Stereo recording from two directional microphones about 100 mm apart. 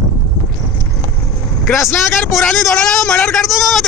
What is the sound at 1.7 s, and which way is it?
Speech, 25° left (ahead or behind).